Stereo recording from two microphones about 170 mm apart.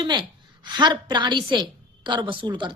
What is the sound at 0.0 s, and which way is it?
A woman's voice, 25° right (ahead or behind).